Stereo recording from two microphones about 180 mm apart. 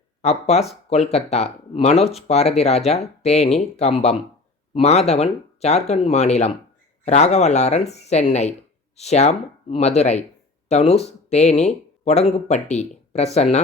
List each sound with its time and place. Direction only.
0.2 s speech: 35° left (ahead or behind)